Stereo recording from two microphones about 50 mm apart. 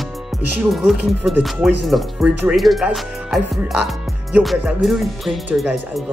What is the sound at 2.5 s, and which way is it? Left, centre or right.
Speech, centre.